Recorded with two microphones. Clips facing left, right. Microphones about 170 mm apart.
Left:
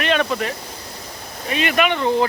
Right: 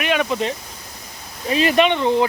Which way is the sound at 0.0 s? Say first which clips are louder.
Even; 10° right (ahead or behind).